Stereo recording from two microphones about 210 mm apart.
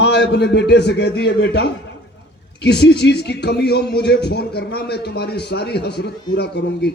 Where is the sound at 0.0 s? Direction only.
50° left (ahead or behind).